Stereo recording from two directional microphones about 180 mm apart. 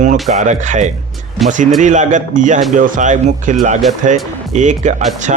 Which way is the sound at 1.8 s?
45° right (ahead or behind).